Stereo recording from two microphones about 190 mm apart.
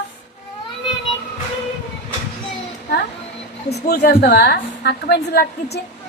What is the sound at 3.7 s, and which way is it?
A woman's voice, 55° left (ahead or behind).